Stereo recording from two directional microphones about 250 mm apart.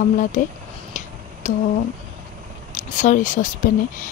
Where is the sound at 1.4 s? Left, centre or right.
Left.